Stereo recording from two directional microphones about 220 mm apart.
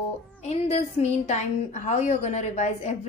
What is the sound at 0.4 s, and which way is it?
A woman's voice, 30° left (ahead or behind).